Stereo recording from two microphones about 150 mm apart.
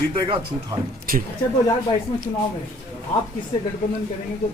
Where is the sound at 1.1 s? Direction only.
75° right (ahead or behind).